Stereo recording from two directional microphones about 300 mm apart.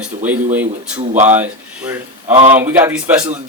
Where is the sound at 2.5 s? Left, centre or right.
Centre.